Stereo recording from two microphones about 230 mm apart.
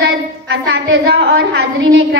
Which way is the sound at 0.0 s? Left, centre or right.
Right.